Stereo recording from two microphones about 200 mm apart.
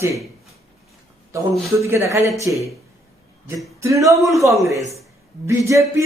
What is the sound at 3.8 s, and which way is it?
Speech, 15° right (ahead or behind).